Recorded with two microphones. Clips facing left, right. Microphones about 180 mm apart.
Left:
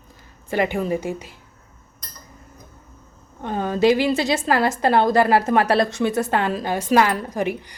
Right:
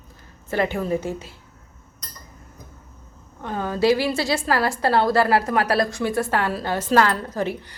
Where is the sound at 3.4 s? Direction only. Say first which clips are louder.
Left 2 dB; 20° left (ahead or behind).